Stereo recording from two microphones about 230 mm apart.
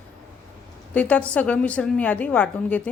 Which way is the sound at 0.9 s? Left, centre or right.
Centre.